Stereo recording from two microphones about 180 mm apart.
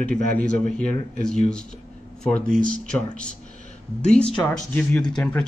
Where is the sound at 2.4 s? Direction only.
5° left (ahead or behind).